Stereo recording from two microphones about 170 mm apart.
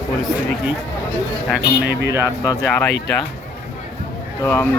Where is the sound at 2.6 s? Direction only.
5° left (ahead or behind).